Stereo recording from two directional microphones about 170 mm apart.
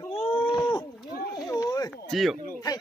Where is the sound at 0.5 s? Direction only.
25° left (ahead or behind).